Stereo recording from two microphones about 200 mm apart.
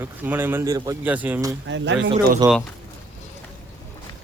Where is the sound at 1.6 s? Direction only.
65° right (ahead or behind).